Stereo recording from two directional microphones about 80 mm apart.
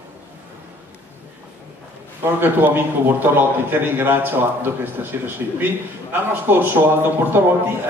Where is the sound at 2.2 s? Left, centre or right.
Right.